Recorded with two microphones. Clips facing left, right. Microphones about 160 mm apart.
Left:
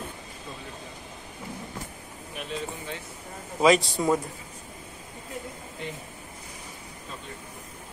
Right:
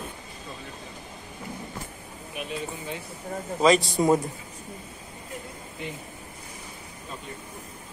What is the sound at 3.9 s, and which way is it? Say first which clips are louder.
Speech: right 3 dB; 20° right (ahead or behind).